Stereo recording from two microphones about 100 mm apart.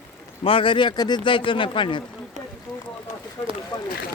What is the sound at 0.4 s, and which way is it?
Speech, 65° left (ahead or behind).